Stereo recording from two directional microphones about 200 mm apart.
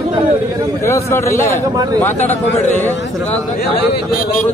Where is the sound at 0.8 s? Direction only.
15° left (ahead or behind).